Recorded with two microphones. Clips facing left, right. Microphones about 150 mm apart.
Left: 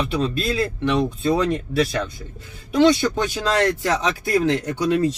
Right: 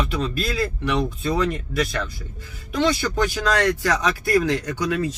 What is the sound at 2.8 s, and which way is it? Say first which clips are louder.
Speech: left 4 dB; 25° left (ahead or behind).